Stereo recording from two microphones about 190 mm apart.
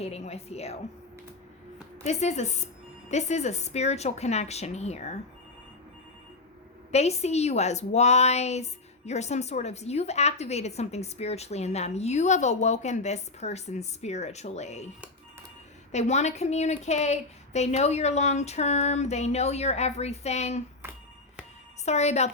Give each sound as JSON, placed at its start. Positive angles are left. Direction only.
{"t": 0.0, "sound": "a woman's voice", "side_deg": 35}
{"t": 2.0, "sound": "a woman's voice", "side_deg": 35}
{"t": 6.9, "sound": "a woman's voice", "side_deg": 35}
{"t": 15.9, "sound": "a woman's voice", "side_deg": 35}
{"t": 21.8, "sound": "a woman's voice", "side_deg": 35}